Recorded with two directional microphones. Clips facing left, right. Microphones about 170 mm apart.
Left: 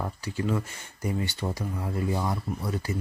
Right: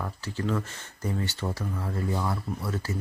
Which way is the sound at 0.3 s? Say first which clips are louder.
Even; 10° left (ahead or behind).